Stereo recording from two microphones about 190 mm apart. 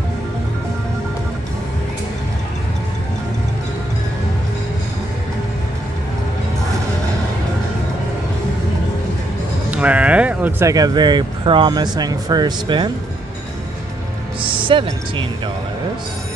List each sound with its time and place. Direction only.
9.7 s speech: 5° right (ahead or behind); by 12.9 s 25° right (ahead or behind)
14.4 s speech: 25° right (ahead or behind)